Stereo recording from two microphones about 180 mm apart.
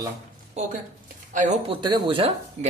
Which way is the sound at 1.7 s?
25° right (ahead or behind).